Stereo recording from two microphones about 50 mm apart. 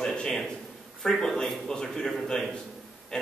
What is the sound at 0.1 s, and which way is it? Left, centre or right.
A man's voice, centre.